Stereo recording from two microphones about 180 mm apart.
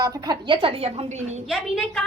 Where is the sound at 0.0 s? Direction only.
20° right (ahead or behind); by 1.4 s 40° right (ahead or behind).